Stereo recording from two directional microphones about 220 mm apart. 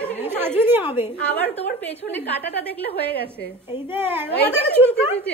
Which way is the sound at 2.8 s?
45° left (ahead or behind).